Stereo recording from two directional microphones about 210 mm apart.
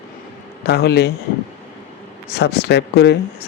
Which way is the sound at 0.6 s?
50° left (ahead or behind).